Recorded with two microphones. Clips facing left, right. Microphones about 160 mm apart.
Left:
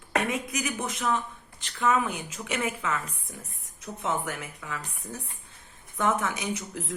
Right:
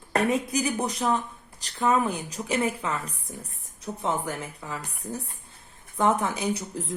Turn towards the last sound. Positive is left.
turn(degrees=-30)  # may be behind; listen again after turning